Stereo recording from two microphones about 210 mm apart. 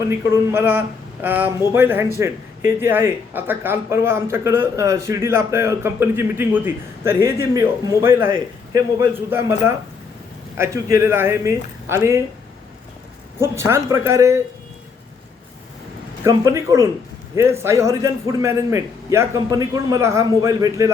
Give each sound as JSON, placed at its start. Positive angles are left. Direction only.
{"t": 0.3, "sound": "speech", "side_deg": -10}
{"t": 13.4, "sound": "speech", "side_deg": -15}
{"t": 16.2, "sound": "speech", "side_deg": -15}